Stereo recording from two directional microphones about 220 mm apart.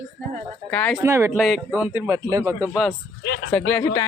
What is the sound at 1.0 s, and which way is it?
Speech, 10° right (ahead or behind).